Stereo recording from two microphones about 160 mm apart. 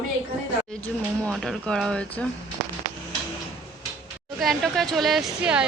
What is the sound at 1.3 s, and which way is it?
Speech, 5° left (ahead or behind).